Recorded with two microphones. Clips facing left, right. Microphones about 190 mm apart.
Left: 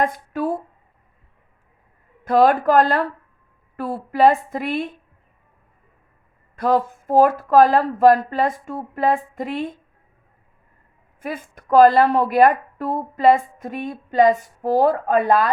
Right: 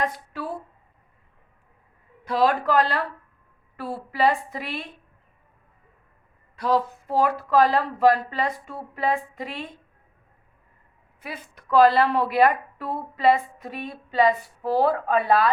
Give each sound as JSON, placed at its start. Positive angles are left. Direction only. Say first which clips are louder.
{"t": 0.0, "sound": "speech", "louder": "left 7 dB", "side_deg": 50}
{"t": 2.2, "sound": "a woman's voice", "louder": "left 6 dB", "side_deg": 50}
{"t": 6.6, "sound": "a woman's voice", "louder": "left 4 dB", "side_deg": 50}
{"t": 11.2, "sound": "a woman's voice", "louder": "left 8 dB", "side_deg": 50}